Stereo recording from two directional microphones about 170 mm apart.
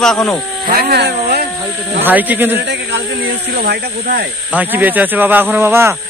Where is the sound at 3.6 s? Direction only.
65° right (ahead or behind).